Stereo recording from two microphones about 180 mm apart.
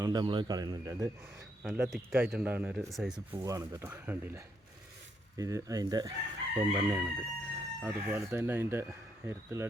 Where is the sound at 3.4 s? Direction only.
20° right (ahead or behind).